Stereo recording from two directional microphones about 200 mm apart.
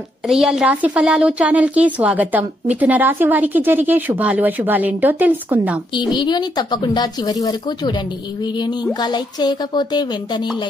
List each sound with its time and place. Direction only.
0.3 s speech: centre (ahead or behind)
5.9 s speech: 20° left (ahead or behind)
9.0 s speech: 20° left (ahead or behind)